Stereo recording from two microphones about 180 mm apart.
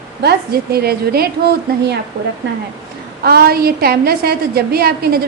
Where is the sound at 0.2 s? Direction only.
60° right (ahead or behind).